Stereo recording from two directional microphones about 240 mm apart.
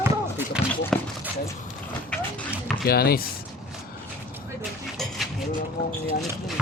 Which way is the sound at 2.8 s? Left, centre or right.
Left.